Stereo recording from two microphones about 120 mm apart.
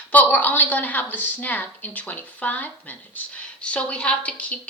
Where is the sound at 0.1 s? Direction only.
15° left (ahead or behind).